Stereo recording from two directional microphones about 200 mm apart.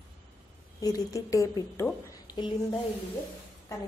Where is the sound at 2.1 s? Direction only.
20° left (ahead or behind).